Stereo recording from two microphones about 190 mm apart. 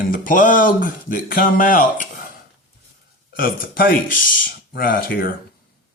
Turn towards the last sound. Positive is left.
turn(degrees=50)  # may be behind; listen again after turning